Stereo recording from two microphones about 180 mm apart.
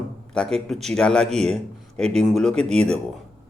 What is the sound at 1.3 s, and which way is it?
Speech, 35° right (ahead or behind).